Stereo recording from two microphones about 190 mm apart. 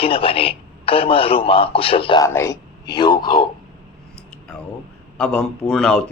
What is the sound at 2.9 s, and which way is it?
Speech, 20° left (ahead or behind).